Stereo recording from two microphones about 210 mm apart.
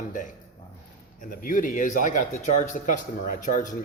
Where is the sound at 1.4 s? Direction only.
40° left (ahead or behind).